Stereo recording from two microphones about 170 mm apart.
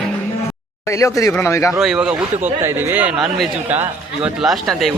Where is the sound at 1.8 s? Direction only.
5° right (ahead or behind).